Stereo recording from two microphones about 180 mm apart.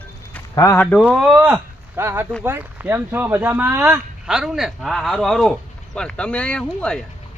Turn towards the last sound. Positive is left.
turn(degrees=5)  # may be behind; listen again after turning